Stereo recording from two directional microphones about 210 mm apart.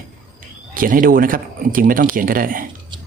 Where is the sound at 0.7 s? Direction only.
40° right (ahead or behind).